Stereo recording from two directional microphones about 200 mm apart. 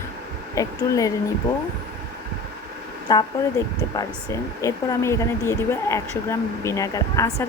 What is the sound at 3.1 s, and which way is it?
Speech, 20° left (ahead or behind).